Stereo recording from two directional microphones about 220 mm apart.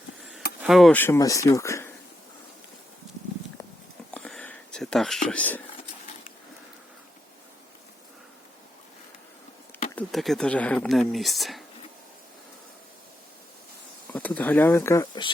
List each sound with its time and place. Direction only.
0.6 s speech: centre (ahead or behind)
4.1 s a sound: 5° left (ahead or behind)
5.3 s speech: 5° left (ahead or behind)
9.9 s speech: centre (ahead or behind)
14.1 s speech: 5° left (ahead or behind)